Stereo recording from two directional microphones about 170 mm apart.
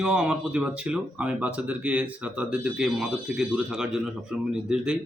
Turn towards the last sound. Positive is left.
turn(degrees=-5)  # may be behind; listen again after turning